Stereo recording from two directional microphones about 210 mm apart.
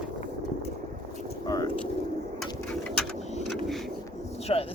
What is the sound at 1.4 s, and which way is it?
Vehicle, 15° left (ahead or behind).